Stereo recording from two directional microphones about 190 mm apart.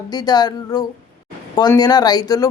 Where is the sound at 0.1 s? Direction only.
20° left (ahead or behind).